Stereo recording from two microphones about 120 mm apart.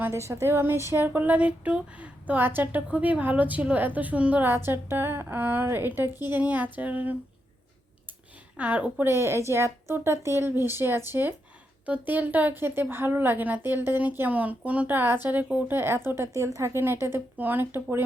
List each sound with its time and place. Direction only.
0.0 s speech: 25° right (ahead or behind)
8.5 s speech: 10° right (ahead or behind)